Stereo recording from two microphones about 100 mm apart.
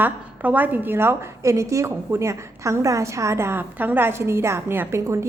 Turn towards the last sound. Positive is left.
turn(degrees=-25)  # may be behind; listen again after turning